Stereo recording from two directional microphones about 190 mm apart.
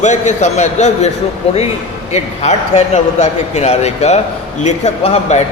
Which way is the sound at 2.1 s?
35° left (ahead or behind).